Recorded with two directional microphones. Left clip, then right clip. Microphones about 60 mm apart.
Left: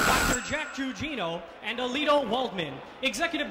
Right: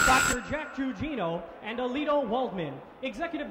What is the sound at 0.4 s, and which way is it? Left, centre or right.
Speech, left.